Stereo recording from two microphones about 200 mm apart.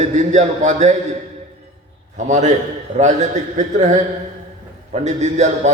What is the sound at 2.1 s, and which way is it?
A man's voice, 35° right (ahead or behind).